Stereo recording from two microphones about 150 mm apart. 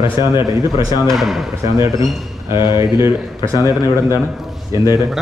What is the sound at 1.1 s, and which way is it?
Speech, centre (ahead or behind).